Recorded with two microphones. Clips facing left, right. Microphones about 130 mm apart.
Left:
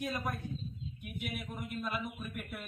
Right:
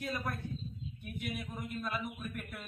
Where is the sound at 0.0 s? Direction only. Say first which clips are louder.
Left 1 dB; 15° left (ahead or behind).